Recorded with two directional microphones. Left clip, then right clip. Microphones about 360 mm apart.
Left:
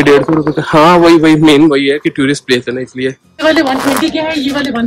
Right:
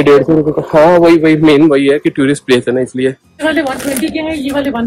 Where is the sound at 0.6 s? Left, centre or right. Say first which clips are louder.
Left 1 dB; left.